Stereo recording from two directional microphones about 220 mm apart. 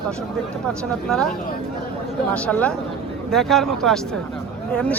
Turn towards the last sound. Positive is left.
turn(degrees=5)  # may be behind; listen again after turning